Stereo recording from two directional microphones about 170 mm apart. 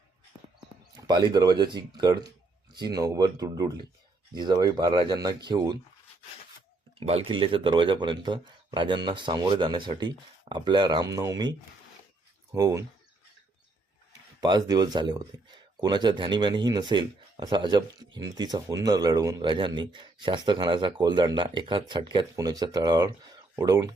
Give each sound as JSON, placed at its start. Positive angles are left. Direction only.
{"t": 1.0, "sound": "speech", "side_deg": -25}
{"t": 7.0, "sound": "speech", "side_deg": -35}
{"t": 14.4, "sound": "speech", "side_deg": -25}